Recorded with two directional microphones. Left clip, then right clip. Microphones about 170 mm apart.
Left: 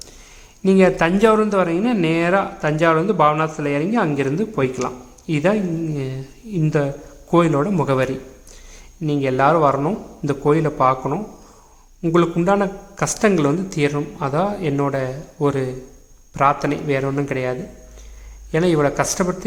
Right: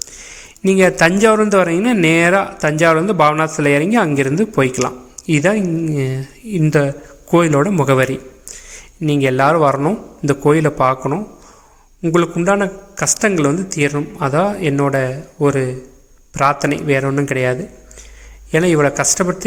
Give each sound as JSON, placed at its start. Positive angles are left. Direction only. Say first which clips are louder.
{"t": 0.2, "sound": "a man's voice", "louder": "right 6 dB", "side_deg": -20}
{"t": 12.4, "sound": "speech", "louder": "right 3 dB", "side_deg": -10}